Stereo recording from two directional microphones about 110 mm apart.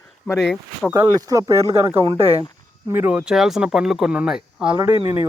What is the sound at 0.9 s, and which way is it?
Speech, 30° right (ahead or behind).